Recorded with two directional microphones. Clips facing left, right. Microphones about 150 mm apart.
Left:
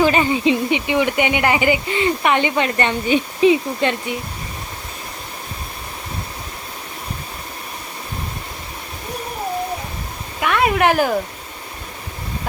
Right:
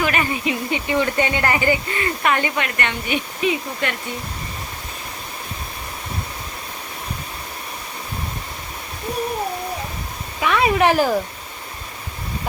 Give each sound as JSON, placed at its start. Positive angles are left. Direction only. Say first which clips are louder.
{"t": 0.0, "sound": "speech", "louder": "left 6 dB", "side_deg": 25}
{"t": 10.4, "sound": "speech", "louder": "even", "side_deg": 0}